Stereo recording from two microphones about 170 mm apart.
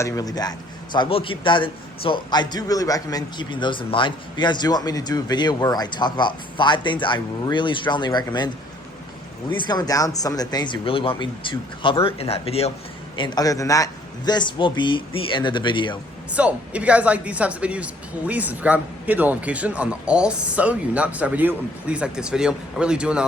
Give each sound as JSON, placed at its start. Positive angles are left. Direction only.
{"t": 0.0, "sound": "a man's voice", "side_deg": 20}
{"t": 9.6, "sound": "a man's voice", "side_deg": 25}
{"t": 13.1, "sound": "a man's voice", "side_deg": 25}
{"t": 16.3, "sound": "speech", "side_deg": -10}